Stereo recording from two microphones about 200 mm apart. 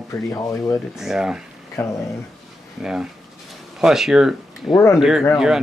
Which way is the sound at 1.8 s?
15° left (ahead or behind).